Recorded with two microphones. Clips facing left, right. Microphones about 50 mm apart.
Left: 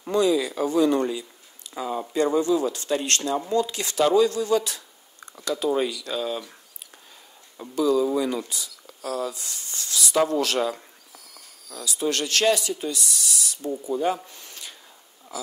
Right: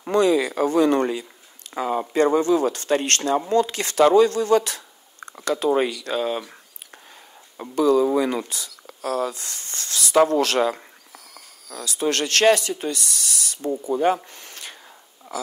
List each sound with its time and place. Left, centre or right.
0.0 s speech: right
7.5 s speech: right